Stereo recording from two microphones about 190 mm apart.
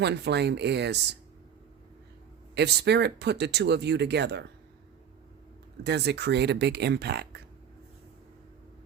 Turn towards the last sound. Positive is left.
turn(degrees=-60)  # may be behind; listen again after turning